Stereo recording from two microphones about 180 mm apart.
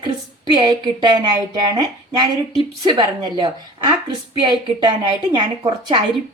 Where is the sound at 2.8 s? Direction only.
25° right (ahead or behind).